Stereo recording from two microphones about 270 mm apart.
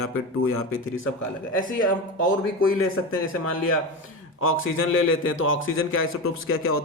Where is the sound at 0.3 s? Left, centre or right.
Left.